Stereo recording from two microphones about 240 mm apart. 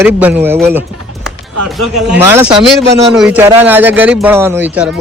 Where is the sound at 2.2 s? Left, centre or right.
Centre.